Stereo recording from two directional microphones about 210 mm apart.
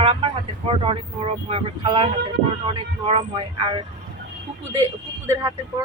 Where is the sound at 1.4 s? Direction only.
25° right (ahead or behind).